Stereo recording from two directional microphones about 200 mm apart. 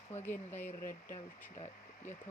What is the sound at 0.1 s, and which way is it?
Speech, 10° left (ahead or behind).